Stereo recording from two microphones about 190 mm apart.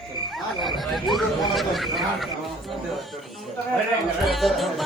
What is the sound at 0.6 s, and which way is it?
Speech, centre (ahead or behind).